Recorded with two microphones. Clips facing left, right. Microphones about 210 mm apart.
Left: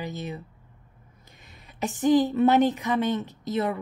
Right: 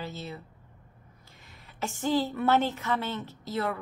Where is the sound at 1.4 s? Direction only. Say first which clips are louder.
Left 5 dB; 20° left (ahead or behind).